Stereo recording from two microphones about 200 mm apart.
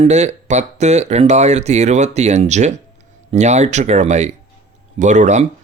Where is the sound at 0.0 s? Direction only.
35° right (ahead or behind).